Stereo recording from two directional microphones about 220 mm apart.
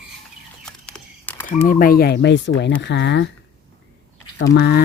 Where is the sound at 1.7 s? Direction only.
40° left (ahead or behind).